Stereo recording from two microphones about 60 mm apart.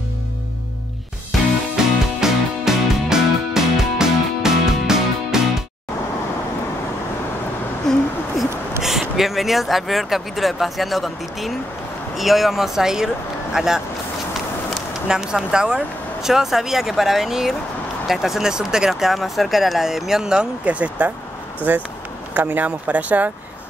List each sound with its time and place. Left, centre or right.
1.8 s music: centre
7.8 s a sound: centre
8.8 s speech: centre
21.7 s speech: right